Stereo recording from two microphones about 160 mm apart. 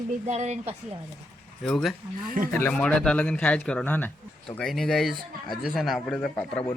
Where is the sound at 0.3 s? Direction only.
45° right (ahead or behind).